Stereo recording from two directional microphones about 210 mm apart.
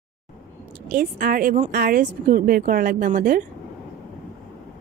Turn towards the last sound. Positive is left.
turn(degrees=-40)  # may be behind; listen again after turning